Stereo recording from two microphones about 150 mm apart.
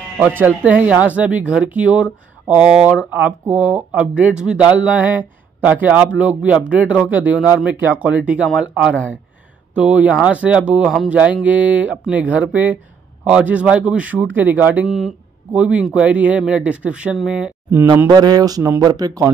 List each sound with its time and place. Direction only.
0.7 s speech: 10° right (ahead or behind)
17.9 s speech: 25° right (ahead or behind)